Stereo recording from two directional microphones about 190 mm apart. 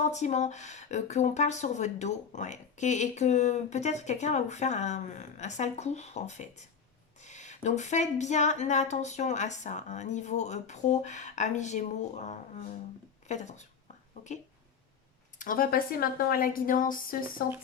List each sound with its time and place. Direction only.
0.0 s speech: 40° left (ahead or behind)
15.4 s a woman's voice: 45° left (ahead or behind)